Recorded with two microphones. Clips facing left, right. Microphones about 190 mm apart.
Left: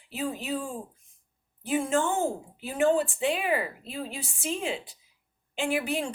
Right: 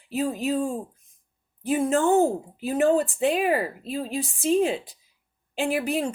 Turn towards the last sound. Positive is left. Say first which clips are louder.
# right 4 dB
turn(degrees=-35)  # may be behind; listen again after turning